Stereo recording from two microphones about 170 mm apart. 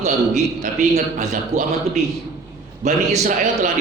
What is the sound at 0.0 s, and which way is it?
A man's voice, 45° right (ahead or behind).